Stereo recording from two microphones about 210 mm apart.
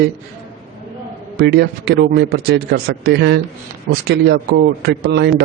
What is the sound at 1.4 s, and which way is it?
A man's voice, 50° right (ahead or behind).